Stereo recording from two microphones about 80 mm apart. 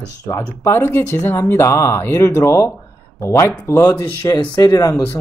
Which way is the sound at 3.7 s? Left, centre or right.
Left.